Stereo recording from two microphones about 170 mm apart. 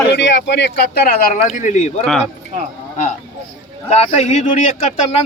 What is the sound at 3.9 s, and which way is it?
Speech, 40° left (ahead or behind).